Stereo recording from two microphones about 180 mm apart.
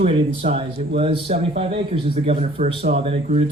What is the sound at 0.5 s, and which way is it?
Speech, 30° right (ahead or behind).